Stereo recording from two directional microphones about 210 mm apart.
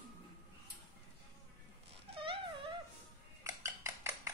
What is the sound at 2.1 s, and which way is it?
Dog, 25° right (ahead or behind).